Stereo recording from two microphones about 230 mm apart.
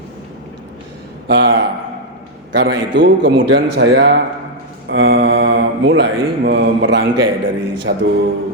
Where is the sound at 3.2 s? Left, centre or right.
Right.